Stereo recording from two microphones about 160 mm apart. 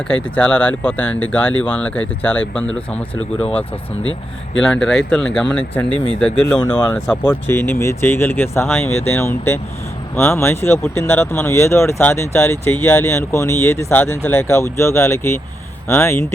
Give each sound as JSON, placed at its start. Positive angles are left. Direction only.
{"t": 0.1, "sound": "speech", "side_deg": 5}
{"t": 4.6, "sound": "speech", "side_deg": 5}
{"t": 6.6, "sound": "speech", "side_deg": 15}